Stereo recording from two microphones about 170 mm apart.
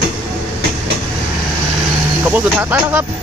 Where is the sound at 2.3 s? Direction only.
10° right (ahead or behind).